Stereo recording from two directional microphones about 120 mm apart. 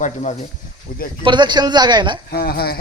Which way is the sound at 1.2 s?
40° right (ahead or behind).